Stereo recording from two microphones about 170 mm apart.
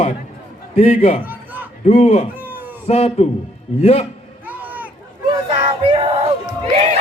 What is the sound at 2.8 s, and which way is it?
Speech, 35° left (ahead or behind).